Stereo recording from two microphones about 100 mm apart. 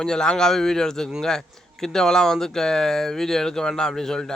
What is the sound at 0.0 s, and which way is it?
Speech, 5° left (ahead or behind).